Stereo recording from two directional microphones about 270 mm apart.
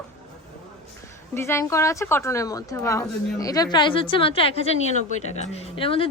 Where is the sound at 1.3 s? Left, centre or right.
Centre.